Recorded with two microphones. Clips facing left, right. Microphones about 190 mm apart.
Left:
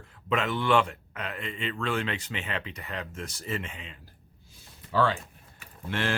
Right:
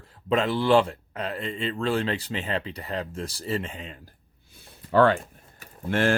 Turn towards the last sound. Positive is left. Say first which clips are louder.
# right 7 dB
turn(degrees=-45)  # may be behind; listen again after turning